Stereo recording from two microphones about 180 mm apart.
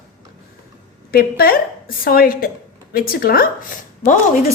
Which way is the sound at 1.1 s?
55° left (ahead or behind).